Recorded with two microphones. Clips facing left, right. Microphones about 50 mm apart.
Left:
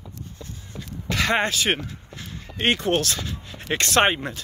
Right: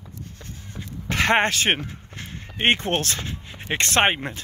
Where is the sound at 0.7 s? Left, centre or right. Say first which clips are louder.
Right 1 dB; right.